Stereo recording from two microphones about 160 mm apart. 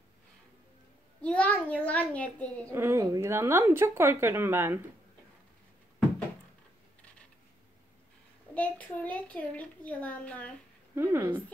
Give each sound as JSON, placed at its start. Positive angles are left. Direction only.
{"t": 1.2, "sound": "a child's voice", "side_deg": 10}
{"t": 2.7, "sound": "a woman's voice", "side_deg": -15}
{"t": 8.5, "sound": "a child's voice", "side_deg": 10}
{"t": 11.0, "sound": "a woman's voice", "side_deg": -15}